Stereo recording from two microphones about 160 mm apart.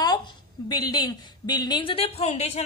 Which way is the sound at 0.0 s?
25° left (ahead or behind).